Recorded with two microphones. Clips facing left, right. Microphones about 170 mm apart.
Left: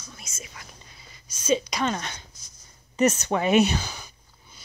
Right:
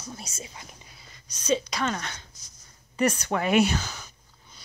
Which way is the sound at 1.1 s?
5° left (ahead or behind).